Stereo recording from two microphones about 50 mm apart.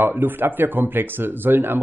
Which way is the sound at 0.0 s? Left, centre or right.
Right.